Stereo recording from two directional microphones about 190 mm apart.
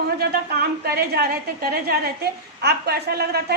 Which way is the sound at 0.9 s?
55° right (ahead or behind).